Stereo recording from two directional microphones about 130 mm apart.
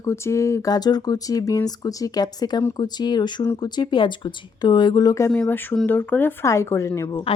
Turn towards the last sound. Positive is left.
turn(degrees=25)  # may be behind; listen again after turning